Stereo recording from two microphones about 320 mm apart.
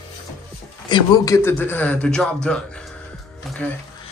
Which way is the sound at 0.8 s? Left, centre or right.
Centre.